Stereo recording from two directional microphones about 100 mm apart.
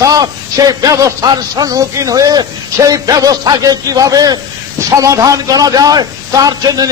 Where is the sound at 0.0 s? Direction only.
35° right (ahead or behind).